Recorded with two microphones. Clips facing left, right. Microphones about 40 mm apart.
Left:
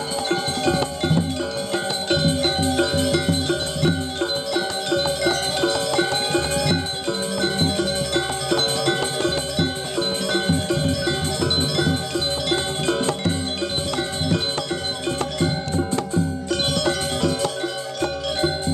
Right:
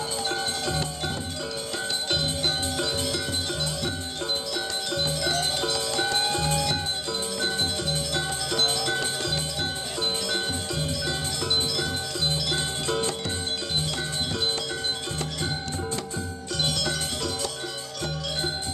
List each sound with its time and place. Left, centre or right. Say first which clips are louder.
0.3 s music: left 9 dB; left
4.9 s music: left 6 dB; left
16.8 s music: left 8 dB; left